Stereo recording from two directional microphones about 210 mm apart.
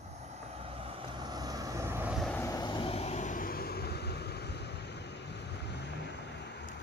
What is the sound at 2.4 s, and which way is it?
Vehicle, 20° left (ahead or behind).